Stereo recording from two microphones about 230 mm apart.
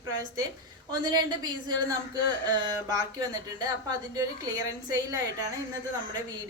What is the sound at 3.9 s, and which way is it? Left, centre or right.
Speech, centre.